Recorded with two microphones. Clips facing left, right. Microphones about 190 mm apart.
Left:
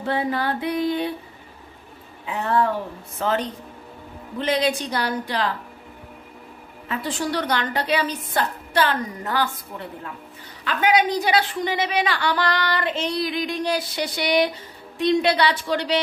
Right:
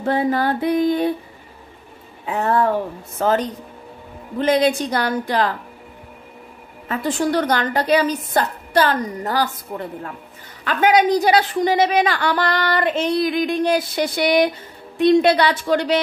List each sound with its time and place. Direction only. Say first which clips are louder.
0.0 s a woman's voice: right 5 dB; 45° right (ahead or behind)
2.2 s a woman's voice: right 3 dB; 45° right (ahead or behind)
6.9 s a woman's voice: right 6 dB; 50° right (ahead or behind)